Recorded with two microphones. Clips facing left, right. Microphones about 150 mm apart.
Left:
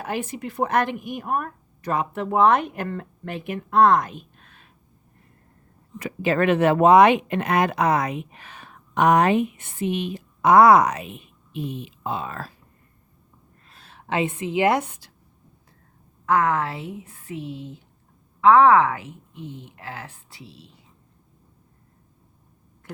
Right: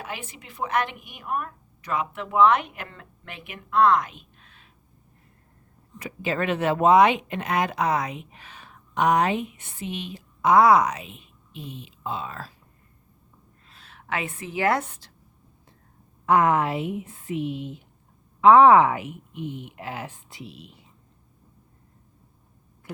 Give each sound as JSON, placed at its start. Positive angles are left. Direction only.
{"t": 0.0, "sound": "speech", "side_deg": 45}
{"t": 6.0, "sound": "speech", "side_deg": 65}
{"t": 13.7, "sound": "a woman's voice", "side_deg": 40}
{"t": 16.2, "sound": "a woman's voice", "side_deg": -20}